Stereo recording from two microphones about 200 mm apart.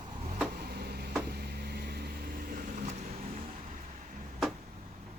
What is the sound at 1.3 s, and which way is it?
Vehicle, 55° right (ahead or behind).